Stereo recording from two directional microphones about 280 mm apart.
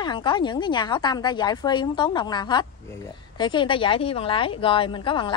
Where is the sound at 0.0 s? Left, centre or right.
Centre.